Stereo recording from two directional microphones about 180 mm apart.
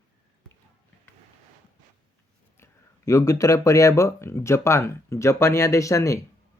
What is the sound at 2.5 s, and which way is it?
Speech, 15° left (ahead or behind).